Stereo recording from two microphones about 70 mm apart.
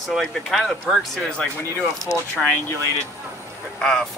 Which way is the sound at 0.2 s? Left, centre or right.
Centre.